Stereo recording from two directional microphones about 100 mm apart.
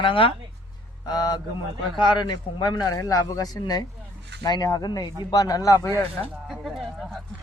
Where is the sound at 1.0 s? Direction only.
45° left (ahead or behind).